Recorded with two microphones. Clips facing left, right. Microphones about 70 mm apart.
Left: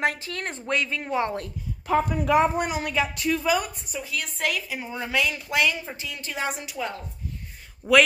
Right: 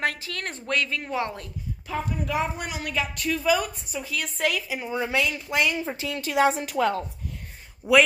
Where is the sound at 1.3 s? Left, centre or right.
Left.